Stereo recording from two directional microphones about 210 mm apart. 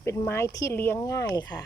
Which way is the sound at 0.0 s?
10° left (ahead or behind).